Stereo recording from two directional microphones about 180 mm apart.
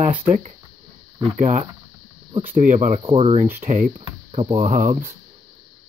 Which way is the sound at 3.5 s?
50° right (ahead or behind).